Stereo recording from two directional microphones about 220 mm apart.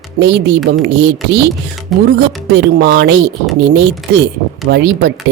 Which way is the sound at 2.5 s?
50° right (ahead or behind).